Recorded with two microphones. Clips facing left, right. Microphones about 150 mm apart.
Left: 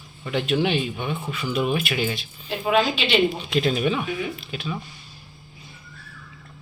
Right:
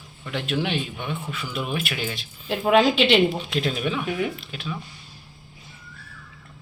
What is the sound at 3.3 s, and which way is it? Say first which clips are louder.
Speech: left 3 dB; centre (ahead or behind).